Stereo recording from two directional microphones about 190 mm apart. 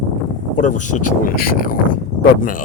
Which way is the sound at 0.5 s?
40° left (ahead or behind).